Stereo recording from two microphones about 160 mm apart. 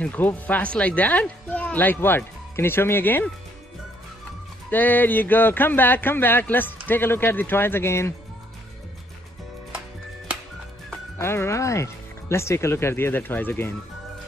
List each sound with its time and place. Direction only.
0.0 s speech: 10° left (ahead or behind)
4.6 s speech: 10° left (ahead or behind)
11.1 s speech: 15° left (ahead or behind)